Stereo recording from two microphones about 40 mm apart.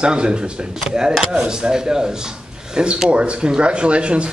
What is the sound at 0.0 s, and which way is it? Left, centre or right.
Speech, right.